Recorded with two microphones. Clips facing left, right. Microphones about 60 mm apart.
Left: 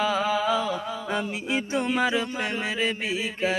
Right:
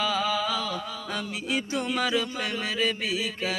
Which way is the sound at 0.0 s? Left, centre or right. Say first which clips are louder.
Left 3 dB; left.